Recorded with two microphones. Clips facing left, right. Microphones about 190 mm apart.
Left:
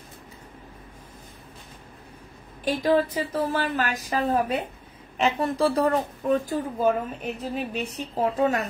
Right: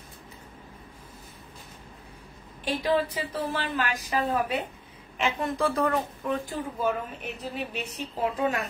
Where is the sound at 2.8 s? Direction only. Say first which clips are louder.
Left 4 dB; 45° left (ahead or behind).